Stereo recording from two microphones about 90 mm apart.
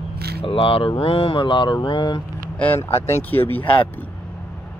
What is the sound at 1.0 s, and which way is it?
Mantra, 90° left.